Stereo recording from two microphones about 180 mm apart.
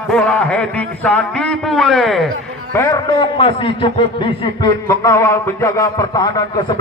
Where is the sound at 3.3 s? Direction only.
30° left (ahead or behind).